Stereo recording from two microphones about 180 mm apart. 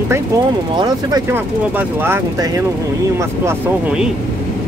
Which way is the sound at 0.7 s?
25° right (ahead or behind).